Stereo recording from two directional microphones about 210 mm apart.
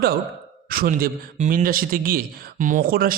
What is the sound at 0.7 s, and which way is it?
Speech, 45° right (ahead or behind).